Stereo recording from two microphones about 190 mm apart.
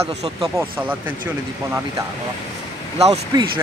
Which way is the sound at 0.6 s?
10° right (ahead or behind).